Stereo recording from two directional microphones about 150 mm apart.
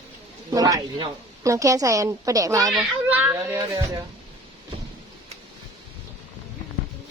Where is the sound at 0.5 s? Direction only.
25° right (ahead or behind).